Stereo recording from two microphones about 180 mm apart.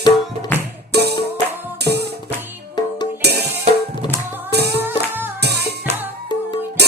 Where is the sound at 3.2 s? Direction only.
65° right (ahead or behind).